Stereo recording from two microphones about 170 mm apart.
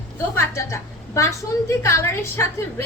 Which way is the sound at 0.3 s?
15° left (ahead or behind).